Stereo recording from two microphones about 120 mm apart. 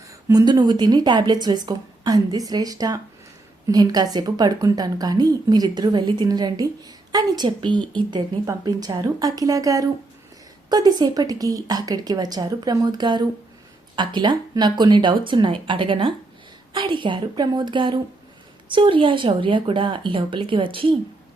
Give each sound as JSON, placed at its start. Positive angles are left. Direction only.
{"t": 0.1, "sound": "a woman's voice", "side_deg": -30}